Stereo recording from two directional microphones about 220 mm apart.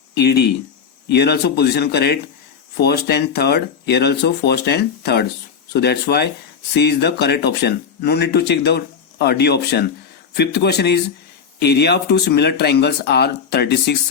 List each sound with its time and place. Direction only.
0.1 s speech: 45° left (ahead or behind)